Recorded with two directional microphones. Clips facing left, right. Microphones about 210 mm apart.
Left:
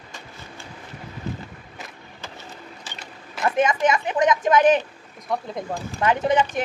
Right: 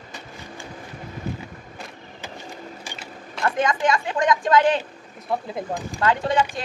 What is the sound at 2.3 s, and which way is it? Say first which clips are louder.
Vehicle: right 4 dB; 10° right (ahead or behind).